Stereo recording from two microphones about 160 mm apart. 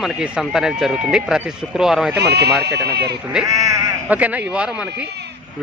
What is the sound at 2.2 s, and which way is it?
Speech, 90° right.